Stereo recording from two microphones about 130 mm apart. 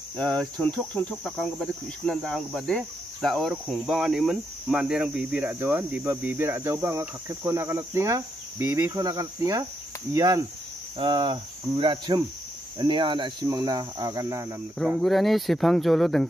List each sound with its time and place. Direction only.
0.2 s cricket: 5° left (ahead or behind)
1.2 s speech: centre (ahead or behind); by 10.4 s 30° right (ahead or behind)
11.0 s cricket: 35° right (ahead or behind)
15.0 s speech: centre (ahead or behind)